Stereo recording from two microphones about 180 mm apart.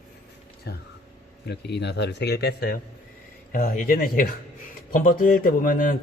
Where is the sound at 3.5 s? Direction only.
50° left (ahead or behind).